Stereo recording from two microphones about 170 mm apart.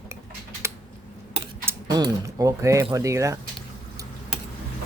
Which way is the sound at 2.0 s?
20° right (ahead or behind).